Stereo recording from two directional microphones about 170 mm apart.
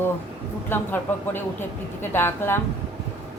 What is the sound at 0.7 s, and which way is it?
A woman's voice, 15° left (ahead or behind).